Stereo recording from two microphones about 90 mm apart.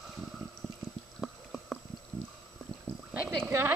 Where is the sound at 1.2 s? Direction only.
Centre (ahead or behind).